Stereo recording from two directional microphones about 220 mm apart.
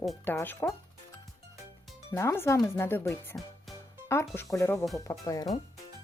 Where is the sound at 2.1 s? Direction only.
10° left (ahead or behind).